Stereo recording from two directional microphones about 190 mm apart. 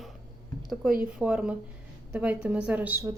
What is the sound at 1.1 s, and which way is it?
A woman's voice, 5° right (ahead or behind).